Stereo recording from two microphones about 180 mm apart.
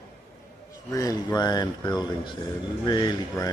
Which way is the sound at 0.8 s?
20° left (ahead or behind).